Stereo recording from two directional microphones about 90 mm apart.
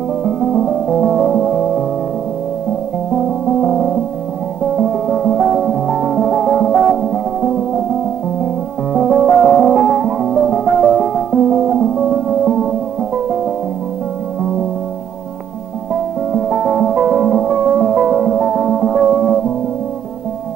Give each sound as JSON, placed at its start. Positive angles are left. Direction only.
{"t": 0.2, "sound": "music", "side_deg": -5}
{"t": 3.4, "sound": "music", "side_deg": -5}
{"t": 8.9, "sound": "music", "side_deg": -5}
{"t": 16.3, "sound": "music", "side_deg": -10}